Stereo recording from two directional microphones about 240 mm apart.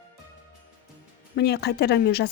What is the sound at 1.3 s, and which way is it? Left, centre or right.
Speech, left.